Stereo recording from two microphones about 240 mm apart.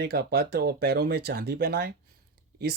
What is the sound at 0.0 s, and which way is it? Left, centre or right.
Speech, right.